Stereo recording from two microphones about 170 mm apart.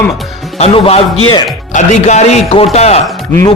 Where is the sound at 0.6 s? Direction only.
35° left (ahead or behind).